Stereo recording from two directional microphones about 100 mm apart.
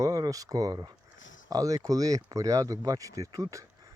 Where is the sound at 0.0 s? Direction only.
35° right (ahead or behind).